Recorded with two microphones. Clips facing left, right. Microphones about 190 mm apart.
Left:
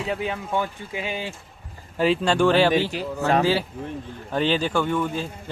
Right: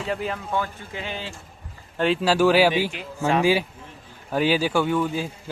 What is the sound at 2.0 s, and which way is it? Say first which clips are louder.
Speech: even; centre (ahead or behind).